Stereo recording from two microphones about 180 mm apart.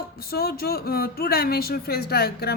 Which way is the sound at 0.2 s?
60° left (ahead or behind).